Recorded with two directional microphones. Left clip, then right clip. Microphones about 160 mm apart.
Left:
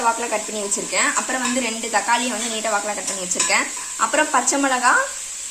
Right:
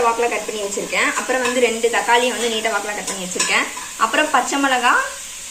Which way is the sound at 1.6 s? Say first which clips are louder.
Right 5 dB; 65° left (ahead or behind).